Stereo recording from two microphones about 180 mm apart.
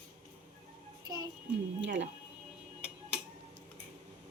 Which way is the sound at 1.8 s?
90° right.